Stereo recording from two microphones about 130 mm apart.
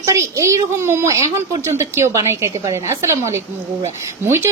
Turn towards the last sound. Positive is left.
turn(degrees=-15)  # may be behind; listen again after turning